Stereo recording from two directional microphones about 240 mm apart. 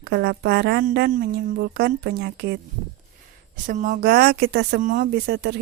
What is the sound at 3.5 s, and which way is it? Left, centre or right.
Speech, right.